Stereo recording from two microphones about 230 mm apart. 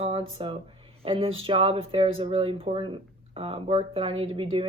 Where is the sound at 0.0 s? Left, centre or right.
Right.